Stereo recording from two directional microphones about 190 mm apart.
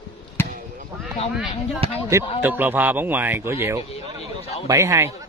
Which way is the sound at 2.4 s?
10° right (ahead or behind).